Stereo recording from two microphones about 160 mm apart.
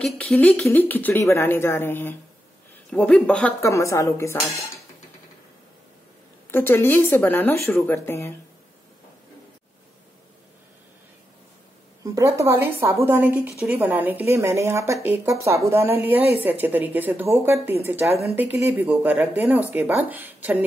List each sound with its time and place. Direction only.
0.0 s speech: 5° left (ahead or behind)
3.6 s a woman's voice: 20° left (ahead or behind)
6.5 s speech: 15° left (ahead or behind)
12.0 s a woman's voice: 20° right (ahead or behind)